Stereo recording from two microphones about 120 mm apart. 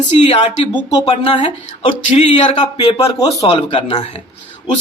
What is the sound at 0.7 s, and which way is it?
Speech, 50° left (ahead or behind).